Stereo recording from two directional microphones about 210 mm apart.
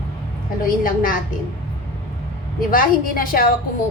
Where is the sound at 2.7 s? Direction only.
40° left (ahead or behind).